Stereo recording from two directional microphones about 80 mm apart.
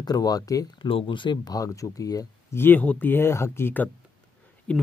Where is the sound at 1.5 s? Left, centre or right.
Left.